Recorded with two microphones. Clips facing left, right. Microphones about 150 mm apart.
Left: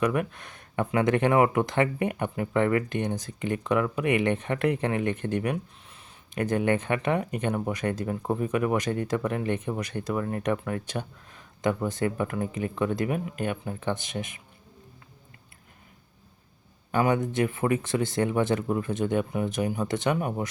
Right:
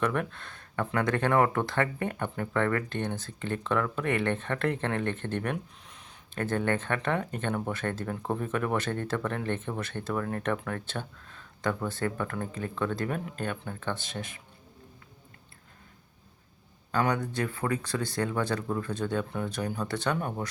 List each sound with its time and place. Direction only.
0.0 s speech: 10° left (ahead or behind)
17.1 s speech: 20° left (ahead or behind)